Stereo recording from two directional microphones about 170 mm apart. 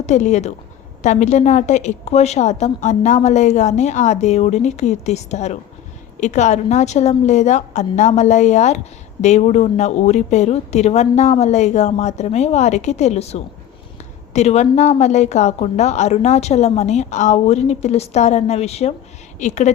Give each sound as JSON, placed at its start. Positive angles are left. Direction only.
{"t": 0.0, "sound": "a woman's voice", "side_deg": 45}